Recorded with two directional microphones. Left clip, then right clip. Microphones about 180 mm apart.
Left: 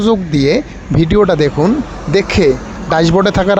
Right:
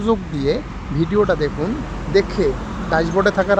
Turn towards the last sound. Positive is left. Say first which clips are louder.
# left 5 dB
turn(degrees=40)  # may be behind; listen again after turning